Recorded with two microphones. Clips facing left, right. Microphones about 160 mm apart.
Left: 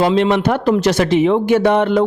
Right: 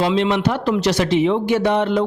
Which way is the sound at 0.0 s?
50° left (ahead or behind).